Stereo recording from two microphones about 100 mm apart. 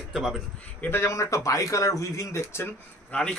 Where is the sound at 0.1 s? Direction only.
5° right (ahead or behind).